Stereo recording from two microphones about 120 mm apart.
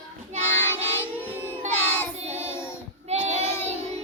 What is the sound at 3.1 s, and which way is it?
Child singing, 65° right (ahead or behind).